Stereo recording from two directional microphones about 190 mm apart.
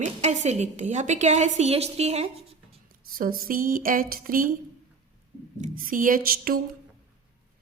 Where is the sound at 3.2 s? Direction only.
50° right (ahead or behind).